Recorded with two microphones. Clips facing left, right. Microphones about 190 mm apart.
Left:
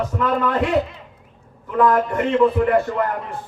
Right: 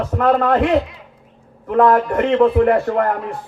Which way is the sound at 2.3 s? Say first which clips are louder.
Right 3 dB; 60° right (ahead or behind).